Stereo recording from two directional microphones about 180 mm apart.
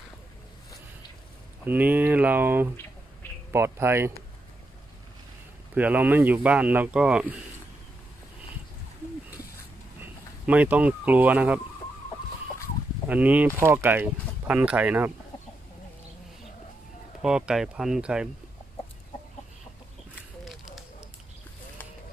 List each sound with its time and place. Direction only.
1.6 s speech: 10° right (ahead or behind)
5.8 s speech: 10° right (ahead or behind)
10.4 s speech: 10° right (ahead or behind)
13.1 s speech: 10° right (ahead or behind)
17.2 s speech: 5° right (ahead or behind)
20.4 s a sound: centre (ahead or behind)